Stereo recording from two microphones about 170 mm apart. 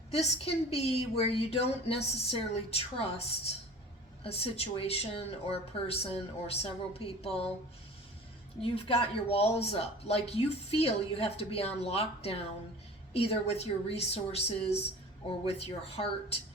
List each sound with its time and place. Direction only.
0.1 s speech: 35° left (ahead or behind)
8.6 s speech: 35° left (ahead or behind)